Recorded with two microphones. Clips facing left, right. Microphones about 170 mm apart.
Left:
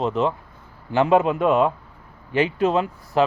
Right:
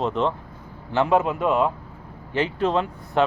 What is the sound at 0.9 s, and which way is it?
A man's voice, 15° left (ahead or behind).